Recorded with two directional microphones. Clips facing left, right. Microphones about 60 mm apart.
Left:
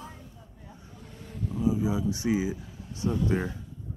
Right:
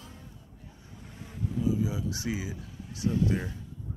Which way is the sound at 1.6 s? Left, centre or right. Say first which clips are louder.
Left 3 dB; left.